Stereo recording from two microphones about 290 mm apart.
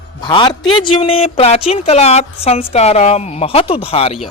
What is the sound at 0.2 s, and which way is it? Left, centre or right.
Speech, centre.